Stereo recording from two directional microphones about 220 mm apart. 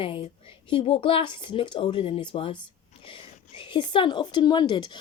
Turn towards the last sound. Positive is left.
turn(degrees=20)  # may be behind; listen again after turning